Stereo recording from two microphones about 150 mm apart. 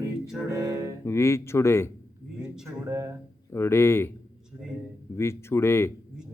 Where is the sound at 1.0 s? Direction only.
20° left (ahead or behind).